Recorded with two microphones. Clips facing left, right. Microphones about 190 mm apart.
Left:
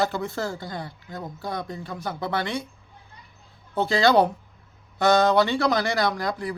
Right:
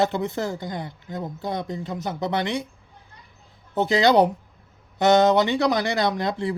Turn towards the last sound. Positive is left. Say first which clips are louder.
# right 2 dB
turn(degrees=-25)  # may be behind; listen again after turning